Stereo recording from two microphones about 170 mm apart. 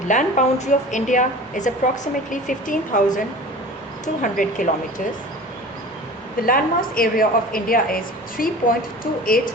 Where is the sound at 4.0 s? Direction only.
50° left (ahead or behind).